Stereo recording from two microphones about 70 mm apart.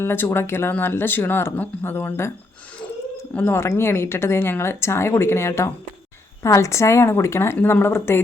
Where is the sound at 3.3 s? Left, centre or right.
Left.